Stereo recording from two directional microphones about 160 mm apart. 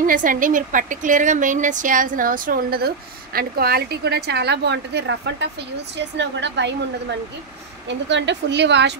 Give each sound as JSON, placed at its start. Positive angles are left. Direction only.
{"t": 0.0, "sound": "a woman's voice", "side_deg": -55}
{"t": 8.1, "sound": "a woman's voice", "side_deg": -90}